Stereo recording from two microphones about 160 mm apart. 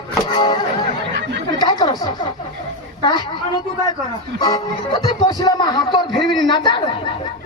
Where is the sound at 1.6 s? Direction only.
25° left (ahead or behind).